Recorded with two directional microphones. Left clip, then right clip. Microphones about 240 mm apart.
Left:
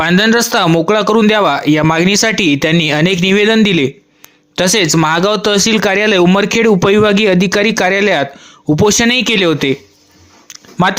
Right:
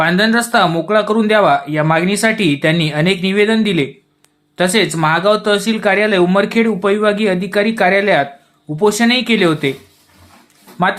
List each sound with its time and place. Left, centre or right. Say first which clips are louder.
0.0 s a man's voice: left 2 dB; left